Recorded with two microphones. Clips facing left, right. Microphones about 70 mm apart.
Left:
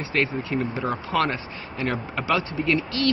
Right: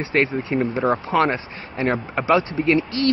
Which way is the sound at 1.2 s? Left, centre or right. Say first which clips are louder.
Right 5 dB; right.